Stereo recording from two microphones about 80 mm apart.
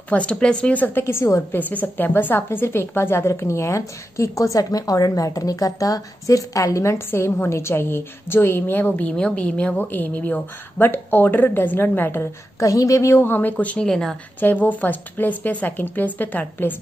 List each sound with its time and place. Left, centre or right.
0.1 s a woman's voice: centre; by 1.4 s left
1.5 s a woman's voice: left
12.5 s a woman's voice: left; by 13.8 s centre
13.8 s a woman's voice: centre
14.4 s a woman's voice: left